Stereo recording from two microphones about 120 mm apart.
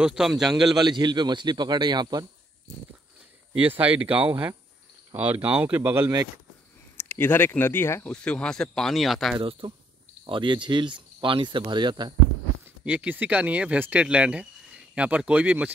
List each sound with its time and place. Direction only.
0.0 s speech: 5° right (ahead or behind)
0.7 s speech: 35° right (ahead or behind)
3.7 s speech: 15° right (ahead or behind)
7.0 s speech: 20° left (ahead or behind); by 9.4 s centre (ahead or behind)
9.4 s speech: 45° right (ahead or behind)
12.8 s speech: 10° right (ahead or behind)